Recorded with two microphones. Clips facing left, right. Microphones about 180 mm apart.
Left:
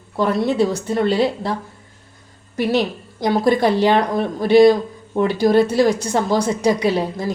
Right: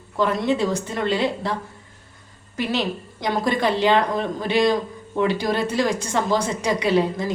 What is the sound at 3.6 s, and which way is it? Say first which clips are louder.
Speech: left 3 dB; 10° left (ahead or behind).